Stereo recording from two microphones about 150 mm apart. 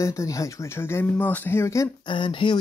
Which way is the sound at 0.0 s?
20° left (ahead or behind).